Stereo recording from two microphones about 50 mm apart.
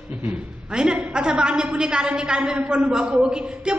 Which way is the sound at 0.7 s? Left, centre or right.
Centre.